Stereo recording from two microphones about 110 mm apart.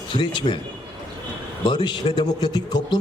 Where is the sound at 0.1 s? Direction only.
45° left (ahead or behind).